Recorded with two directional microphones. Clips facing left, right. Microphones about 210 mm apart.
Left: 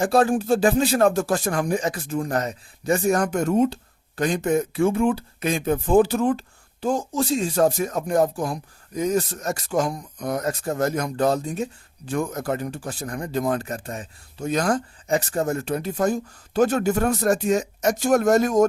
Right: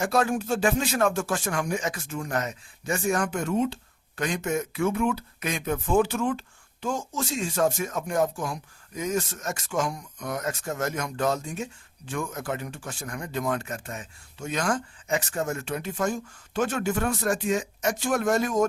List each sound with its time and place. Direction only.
0.0 s speech: 30° left (ahead or behind)